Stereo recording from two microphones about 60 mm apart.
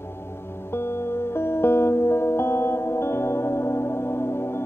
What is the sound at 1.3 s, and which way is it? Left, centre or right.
Music, left.